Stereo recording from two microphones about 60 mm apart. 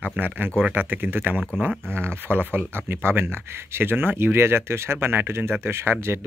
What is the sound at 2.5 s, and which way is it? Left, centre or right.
Speech, right.